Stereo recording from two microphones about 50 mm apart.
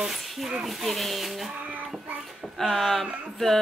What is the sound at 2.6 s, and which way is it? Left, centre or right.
A woman's voice, centre.